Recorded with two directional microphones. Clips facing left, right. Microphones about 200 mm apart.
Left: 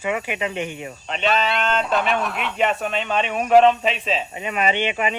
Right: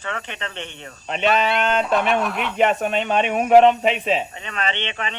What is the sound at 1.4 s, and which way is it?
Speech, 50° right (ahead or behind).